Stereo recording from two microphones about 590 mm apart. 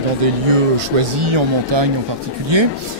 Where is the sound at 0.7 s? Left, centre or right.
Right.